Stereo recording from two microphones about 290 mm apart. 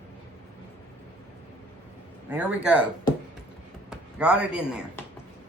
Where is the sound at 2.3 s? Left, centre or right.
Centre.